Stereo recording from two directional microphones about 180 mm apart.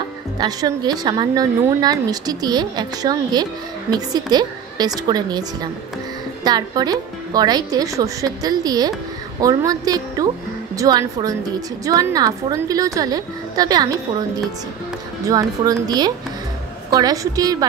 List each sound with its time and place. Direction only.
0.4 s a woman's voice: 20° right (ahead or behind)
15.2 s a woman's voice: 20° right (ahead or behind)